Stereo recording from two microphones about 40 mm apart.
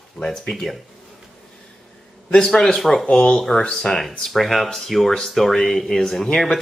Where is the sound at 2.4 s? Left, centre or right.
Centre.